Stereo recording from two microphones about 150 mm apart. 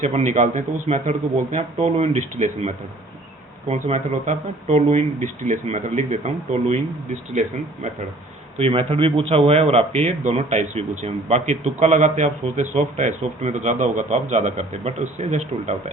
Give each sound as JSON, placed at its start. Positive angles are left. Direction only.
{"t": 0.0, "sound": "a man's voice", "side_deg": -50}
{"t": 8.5, "sound": "a man's voice", "side_deg": -40}